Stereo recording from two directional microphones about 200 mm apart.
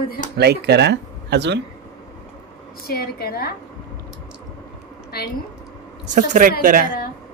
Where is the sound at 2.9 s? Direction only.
50° left (ahead or behind).